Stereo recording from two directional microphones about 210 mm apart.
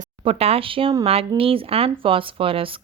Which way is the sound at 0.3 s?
30° right (ahead or behind).